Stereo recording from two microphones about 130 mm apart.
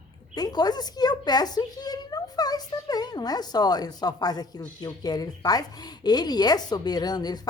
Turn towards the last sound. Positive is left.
turn(degrees=30)  # may be behind; listen again after turning